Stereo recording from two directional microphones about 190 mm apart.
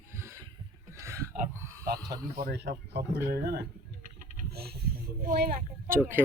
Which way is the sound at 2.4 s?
60° right (ahead or behind).